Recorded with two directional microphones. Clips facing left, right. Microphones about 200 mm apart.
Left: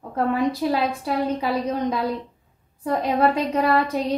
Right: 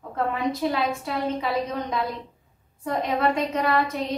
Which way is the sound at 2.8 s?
35° left (ahead or behind).